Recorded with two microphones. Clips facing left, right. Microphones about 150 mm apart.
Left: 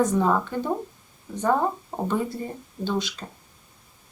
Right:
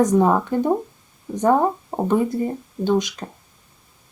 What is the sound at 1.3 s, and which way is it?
Speech, 20° right (ahead or behind).